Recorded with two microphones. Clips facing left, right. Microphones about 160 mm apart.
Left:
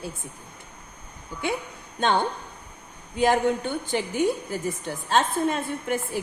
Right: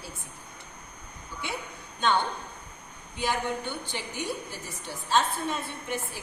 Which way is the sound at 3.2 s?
50° left (ahead or behind).